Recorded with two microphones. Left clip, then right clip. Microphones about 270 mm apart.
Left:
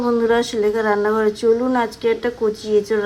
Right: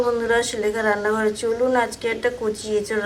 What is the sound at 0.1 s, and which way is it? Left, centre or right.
A woman's voice, left.